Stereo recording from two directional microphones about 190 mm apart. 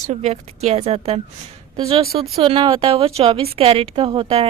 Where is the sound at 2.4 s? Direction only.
25° right (ahead or behind).